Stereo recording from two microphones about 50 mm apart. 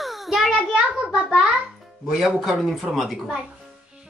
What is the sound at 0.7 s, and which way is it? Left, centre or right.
Speech, right.